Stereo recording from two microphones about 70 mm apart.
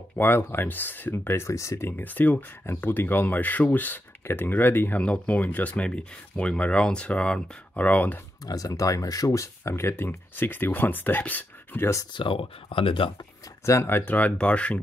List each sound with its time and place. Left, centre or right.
0.1 s speech: left
5.0 s speech: centre
8.5 s speech: left
11.8 s speech: left
13.7 s speech: left
14.1 s speech: centre